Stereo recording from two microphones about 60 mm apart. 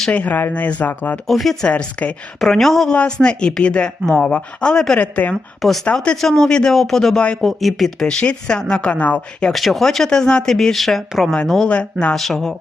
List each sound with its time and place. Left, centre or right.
0.1 s speech: left
1.3 s speech: centre
1.6 s speech: left
2.4 s speech: centre
2.9 s a woman's voice: centre
4.9 s speech: left
5.3 s speech: centre
5.8 s a woman's voice: centre
6.1 s a woman's voice: centre; by 9.2 s left
9.5 s a woman's voice: centre
11.7 s speech: centre
12.1 s speech: centre